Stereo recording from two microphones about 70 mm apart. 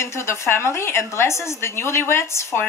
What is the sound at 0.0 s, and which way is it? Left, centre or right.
A woman's voice, left.